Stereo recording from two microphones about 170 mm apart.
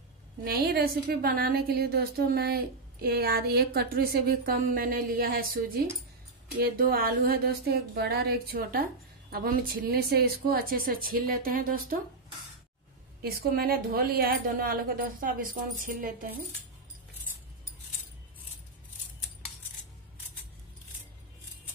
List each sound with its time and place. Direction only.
0.4 s a woman's voice: 60° right (ahead or behind)
6.6 s a woman's voice: 60° right (ahead or behind)
13.2 s a woman's voice: 60° right (ahead or behind)